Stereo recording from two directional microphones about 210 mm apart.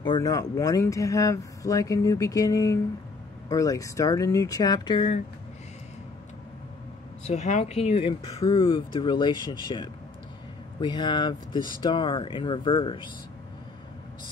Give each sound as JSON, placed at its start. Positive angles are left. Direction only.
{"t": 0.0, "sound": "speech", "side_deg": 20}
{"t": 7.2, "sound": "speech", "side_deg": 35}